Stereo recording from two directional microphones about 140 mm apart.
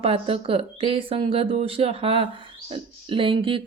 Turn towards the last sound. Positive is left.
turn(degrees=-40)  # may be behind; listen again after turning